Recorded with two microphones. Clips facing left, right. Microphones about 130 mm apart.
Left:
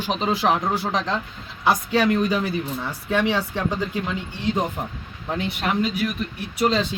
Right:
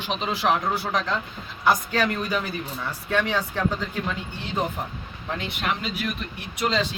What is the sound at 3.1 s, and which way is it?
Speech, 5° left (ahead or behind).